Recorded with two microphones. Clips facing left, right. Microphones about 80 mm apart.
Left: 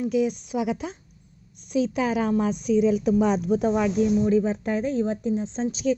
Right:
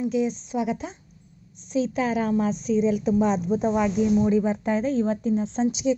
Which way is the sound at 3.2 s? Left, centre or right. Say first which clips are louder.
Left 1 dB; left.